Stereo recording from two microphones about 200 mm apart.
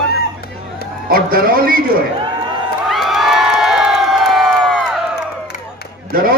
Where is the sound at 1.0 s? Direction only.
45° right (ahead or behind).